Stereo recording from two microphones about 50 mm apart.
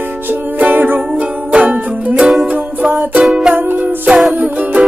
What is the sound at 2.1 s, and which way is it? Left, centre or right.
Music, centre.